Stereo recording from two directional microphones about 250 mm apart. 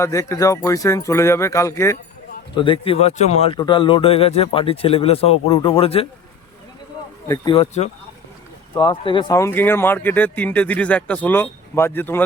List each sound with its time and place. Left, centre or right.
0.0 s speech: centre
7.3 s speech: centre